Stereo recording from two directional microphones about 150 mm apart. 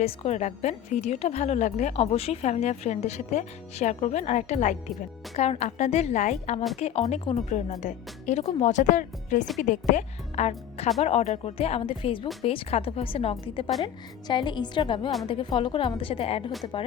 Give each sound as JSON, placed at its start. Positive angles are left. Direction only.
{"t": 0.0, "sound": "a woman's voice", "side_deg": 45}
{"t": 13.8, "sound": "a woman's voice", "side_deg": 30}